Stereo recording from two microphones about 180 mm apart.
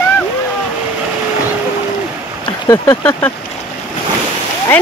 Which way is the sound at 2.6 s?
20° left (ahead or behind).